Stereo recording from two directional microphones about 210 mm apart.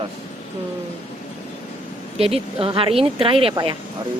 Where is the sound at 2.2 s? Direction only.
25° right (ahead or behind).